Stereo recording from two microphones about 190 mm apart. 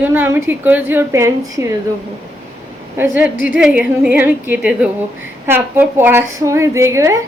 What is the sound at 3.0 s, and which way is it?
A woman's voice, 10° right (ahead or behind).